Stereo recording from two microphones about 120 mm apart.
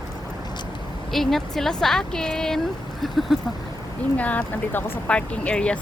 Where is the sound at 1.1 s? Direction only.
Centre (ahead or behind).